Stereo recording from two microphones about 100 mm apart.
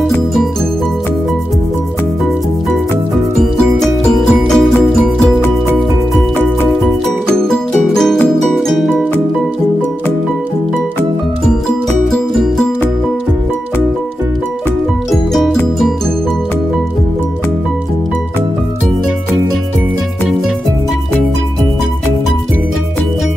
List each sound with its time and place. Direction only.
3.3 s music: centre (ahead or behind)
7.4 s music: 5° left (ahead or behind)
15.0 s music: centre (ahead or behind)